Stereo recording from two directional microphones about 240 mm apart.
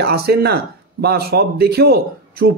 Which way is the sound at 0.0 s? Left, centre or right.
Right.